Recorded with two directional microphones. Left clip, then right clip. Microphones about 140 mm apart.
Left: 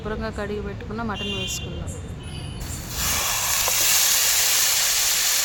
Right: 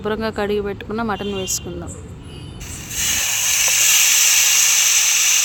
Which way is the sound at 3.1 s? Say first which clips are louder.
Right 4 dB; centre (ahead or behind).